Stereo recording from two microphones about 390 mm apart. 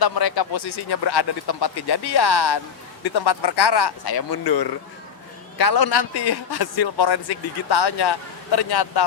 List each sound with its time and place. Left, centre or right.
0.0 s speech: left
7.7 s speech: left